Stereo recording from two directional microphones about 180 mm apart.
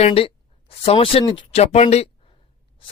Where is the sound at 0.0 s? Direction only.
30° left (ahead or behind).